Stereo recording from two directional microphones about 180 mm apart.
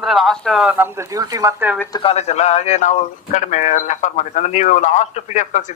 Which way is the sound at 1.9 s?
30° left (ahead or behind).